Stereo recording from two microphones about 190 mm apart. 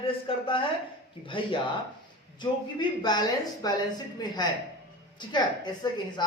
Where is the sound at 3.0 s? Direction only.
20° left (ahead or behind).